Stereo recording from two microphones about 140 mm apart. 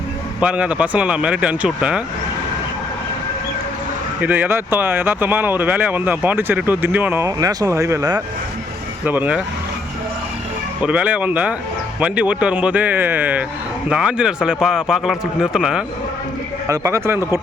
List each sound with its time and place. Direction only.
0.3 s speech: 10° right (ahead or behind)
4.2 s speech: 10° right (ahead or behind)
9.0 s speech: 10° right (ahead or behind)
10.8 s a man's voice: 10° right (ahead or behind)
16.6 s a man's voice: 20° right (ahead or behind)